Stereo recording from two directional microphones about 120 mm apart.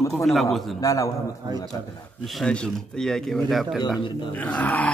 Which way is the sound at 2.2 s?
5° left (ahead or behind).